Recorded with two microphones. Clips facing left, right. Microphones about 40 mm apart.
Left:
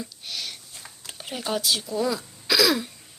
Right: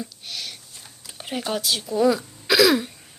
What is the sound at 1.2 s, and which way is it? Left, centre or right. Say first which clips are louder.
Speech: right 1 dB; centre.